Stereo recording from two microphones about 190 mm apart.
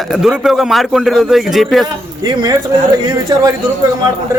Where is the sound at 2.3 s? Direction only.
25° right (ahead or behind).